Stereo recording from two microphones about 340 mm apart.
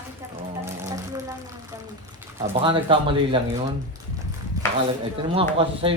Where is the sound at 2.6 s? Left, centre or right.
Centre.